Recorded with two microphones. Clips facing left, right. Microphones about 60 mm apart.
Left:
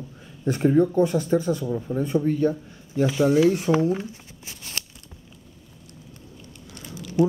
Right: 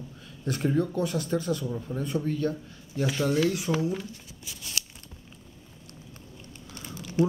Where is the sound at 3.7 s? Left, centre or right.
Left.